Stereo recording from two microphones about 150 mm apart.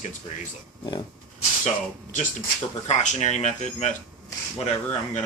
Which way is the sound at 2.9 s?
50° left (ahead or behind).